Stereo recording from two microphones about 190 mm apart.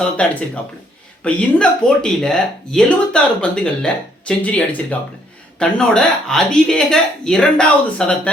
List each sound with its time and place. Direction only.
0.0 s speech: 5° left (ahead or behind)